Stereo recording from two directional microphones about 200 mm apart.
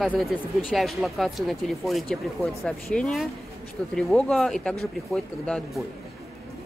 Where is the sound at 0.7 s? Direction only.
Centre (ahead or behind).